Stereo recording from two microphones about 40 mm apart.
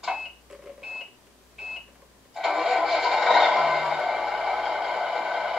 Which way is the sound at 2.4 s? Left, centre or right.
Centre.